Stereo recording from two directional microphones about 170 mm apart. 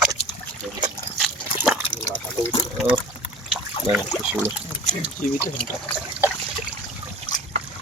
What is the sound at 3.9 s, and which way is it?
Trickle, 35° right (ahead or behind).